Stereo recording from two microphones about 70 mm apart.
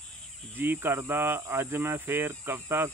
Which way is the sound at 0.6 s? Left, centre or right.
Right.